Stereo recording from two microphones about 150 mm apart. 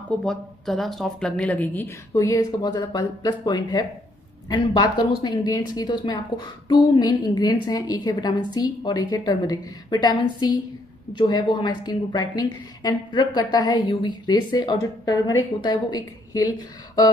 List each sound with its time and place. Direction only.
0.2 s a woman's voice: 5° left (ahead or behind); by 17.1 s 25° left (ahead or behind)